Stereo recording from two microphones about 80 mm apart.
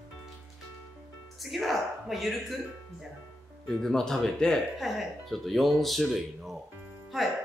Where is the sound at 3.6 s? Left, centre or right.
Centre.